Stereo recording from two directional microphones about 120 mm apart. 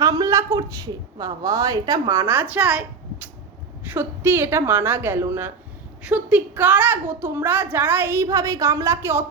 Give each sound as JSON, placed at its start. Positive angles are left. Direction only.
{"t": 0.0, "sound": "a woman's voice", "side_deg": -30}
{"t": 3.8, "sound": "a woman's voice", "side_deg": -15}